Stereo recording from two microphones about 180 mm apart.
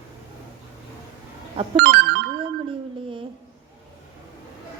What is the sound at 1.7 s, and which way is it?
Telephone bell ringing, 70° right (ahead or behind).